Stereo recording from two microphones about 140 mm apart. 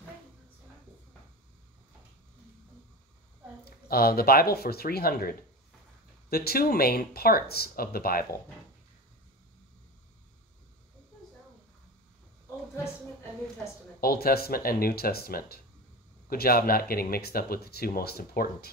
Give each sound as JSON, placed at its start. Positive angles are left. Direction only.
{"t": 3.6, "sound": "speech", "side_deg": 90}
{"t": 6.3, "sound": "speech", "side_deg": 90}
{"t": 14.0, "sound": "speech", "side_deg": 90}